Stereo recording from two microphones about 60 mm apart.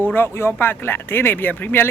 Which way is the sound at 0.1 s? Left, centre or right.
Left.